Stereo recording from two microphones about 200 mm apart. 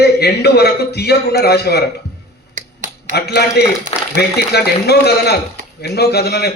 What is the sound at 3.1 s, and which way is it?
A man's voice, 55° left (ahead or behind).